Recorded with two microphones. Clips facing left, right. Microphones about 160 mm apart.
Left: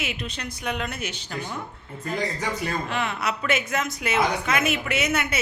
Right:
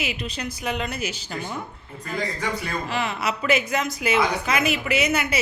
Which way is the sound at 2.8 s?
Centre (ahead or behind).